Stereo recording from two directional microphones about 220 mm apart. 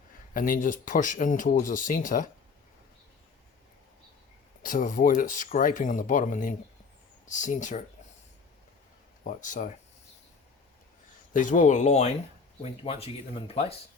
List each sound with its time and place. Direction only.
0.3 s speech: 40° left (ahead or behind)
4.6 s speech: 40° left (ahead or behind)
9.2 s speech: 35° left (ahead or behind)
11.3 s speech: 35° left (ahead or behind)